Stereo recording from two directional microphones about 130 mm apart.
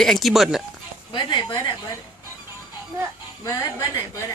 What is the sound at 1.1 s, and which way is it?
Speech, 35° left (ahead or behind).